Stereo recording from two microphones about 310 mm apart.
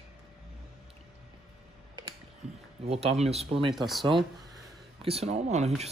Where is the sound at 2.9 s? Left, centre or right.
Centre.